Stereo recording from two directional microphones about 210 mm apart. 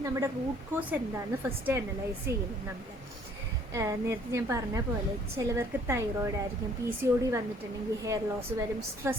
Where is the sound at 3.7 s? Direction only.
15° right (ahead or behind).